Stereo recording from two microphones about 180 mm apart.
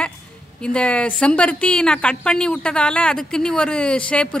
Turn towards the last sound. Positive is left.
turn(degrees=5)  # may be behind; listen again after turning